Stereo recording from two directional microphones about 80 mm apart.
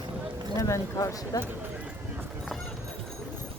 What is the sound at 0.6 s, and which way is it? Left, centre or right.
Speech, left.